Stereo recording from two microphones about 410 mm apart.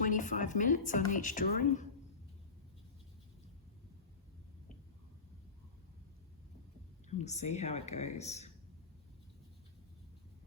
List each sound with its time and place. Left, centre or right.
0.0 s a woman's voice: centre
7.1 s speech: centre